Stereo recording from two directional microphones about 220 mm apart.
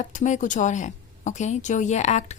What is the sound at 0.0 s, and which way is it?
A woman's voice, 35° left (ahead or behind).